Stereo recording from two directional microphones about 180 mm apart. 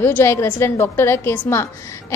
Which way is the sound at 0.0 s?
15° left (ahead or behind).